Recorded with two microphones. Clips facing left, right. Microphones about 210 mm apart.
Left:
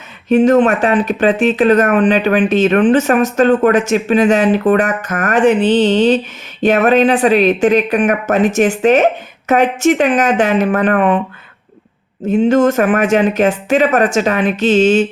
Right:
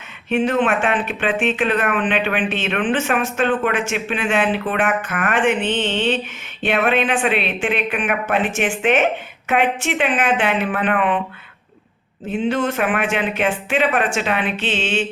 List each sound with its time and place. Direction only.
0.3 s speech: 40° left (ahead or behind)
12.3 s speech: 45° left (ahead or behind)